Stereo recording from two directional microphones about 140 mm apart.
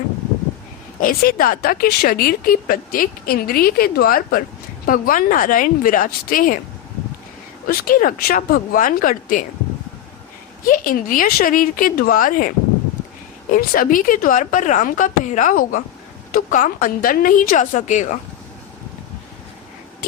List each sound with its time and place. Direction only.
1.0 s speech: 85° left
7.7 s speech: 90° left
10.7 s a woman's voice: 80° left; by 18.2 s 60° left (ahead or behind)